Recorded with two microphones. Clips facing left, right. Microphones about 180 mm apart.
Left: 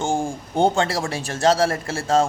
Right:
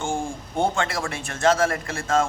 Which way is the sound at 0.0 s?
35° left (ahead or behind).